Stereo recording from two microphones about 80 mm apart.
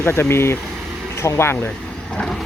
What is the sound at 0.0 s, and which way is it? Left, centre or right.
Speech, left.